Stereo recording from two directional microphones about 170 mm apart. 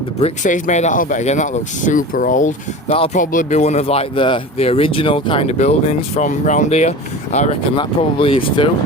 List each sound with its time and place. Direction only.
0.2 s speech: 45° left (ahead or behind)
2.9 s speech: 35° left (ahead or behind)
3.2 s speech: 45° left (ahead or behind)
7.8 s speech: 30° left (ahead or behind)